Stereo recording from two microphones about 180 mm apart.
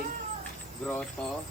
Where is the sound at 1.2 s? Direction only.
5° left (ahead or behind).